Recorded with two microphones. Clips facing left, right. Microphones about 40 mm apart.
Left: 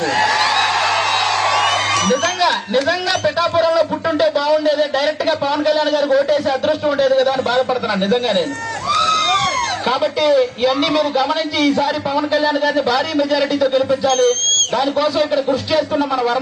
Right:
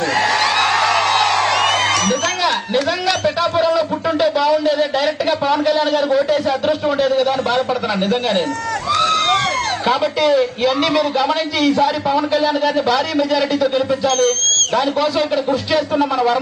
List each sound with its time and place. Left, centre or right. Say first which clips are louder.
0.2 s music: even; right
2.4 s a sound: left 1 dB; centre
3.8 s speech: left 1 dB; centre
8.9 s vehicle: even; right
9.8 s a man's voice: right 1 dB; centre
14.1 s speech: left 2 dB; left
14.8 s a man's voice: even; centre